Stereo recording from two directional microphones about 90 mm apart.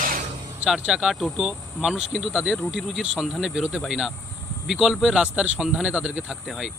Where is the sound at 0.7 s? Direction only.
5° right (ahead or behind).